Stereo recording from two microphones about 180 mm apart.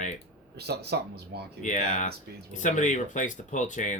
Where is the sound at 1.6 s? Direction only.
45° left (ahead or behind).